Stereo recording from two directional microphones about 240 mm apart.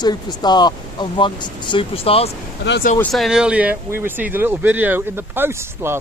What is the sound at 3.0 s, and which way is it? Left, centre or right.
Speech, centre.